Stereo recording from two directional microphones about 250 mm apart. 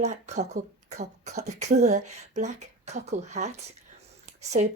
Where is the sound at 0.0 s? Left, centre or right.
Right.